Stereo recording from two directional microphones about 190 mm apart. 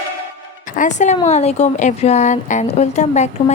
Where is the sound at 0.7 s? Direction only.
40° left (ahead or behind).